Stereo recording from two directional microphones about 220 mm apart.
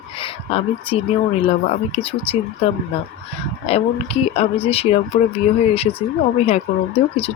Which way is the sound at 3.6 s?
25° left (ahead or behind).